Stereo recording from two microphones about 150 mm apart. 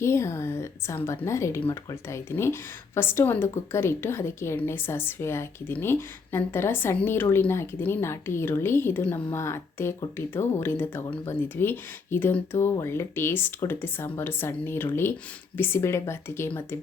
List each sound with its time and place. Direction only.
0.0 s a woman's voice: 20° left (ahead or behind)